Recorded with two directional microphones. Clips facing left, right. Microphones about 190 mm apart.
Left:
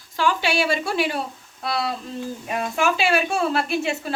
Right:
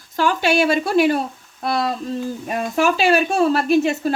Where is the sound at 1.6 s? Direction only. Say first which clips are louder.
Right 4 dB; 45° right (ahead or behind).